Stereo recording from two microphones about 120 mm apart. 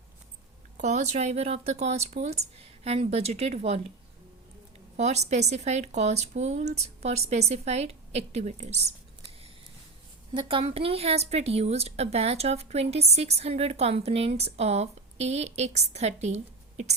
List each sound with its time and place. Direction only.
0.8 s a woman's voice: 75° right (ahead or behind)
4.9 s speech: 65° right (ahead or behind)
10.3 s a woman's voice: 45° right (ahead or behind); by 16.9 s 70° right (ahead or behind)